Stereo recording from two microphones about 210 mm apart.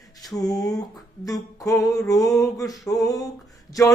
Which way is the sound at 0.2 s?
15° left (ahead or behind).